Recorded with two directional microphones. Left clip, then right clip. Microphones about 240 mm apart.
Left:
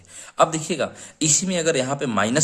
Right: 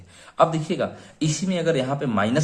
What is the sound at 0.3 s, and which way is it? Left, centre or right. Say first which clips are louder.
A man's voice: even; left.